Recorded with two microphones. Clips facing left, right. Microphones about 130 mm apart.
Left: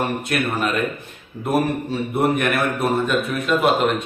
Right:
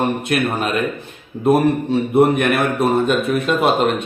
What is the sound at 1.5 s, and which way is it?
A man's voice, 25° right (ahead or behind).